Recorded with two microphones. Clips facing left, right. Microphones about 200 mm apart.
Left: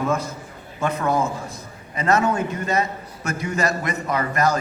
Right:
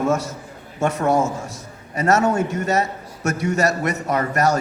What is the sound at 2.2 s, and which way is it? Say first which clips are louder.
A man's voice: right 3 dB; 45° right (ahead or behind).